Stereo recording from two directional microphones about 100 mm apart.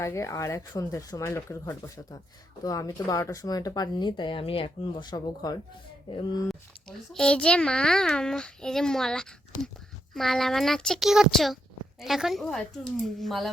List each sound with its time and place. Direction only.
0.0 s speech: 30° left (ahead or behind)
2.6 s speech: 35° left (ahead or behind); by 5.0 s 65° left (ahead or behind)
5.0 s speech: 40° left (ahead or behind)
6.1 s speech: 50° left (ahead or behind)
6.5 s a child's voice: 5° left (ahead or behind)